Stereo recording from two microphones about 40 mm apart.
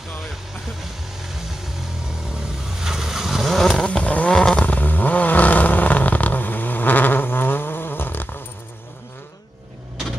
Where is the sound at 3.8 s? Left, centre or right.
Left.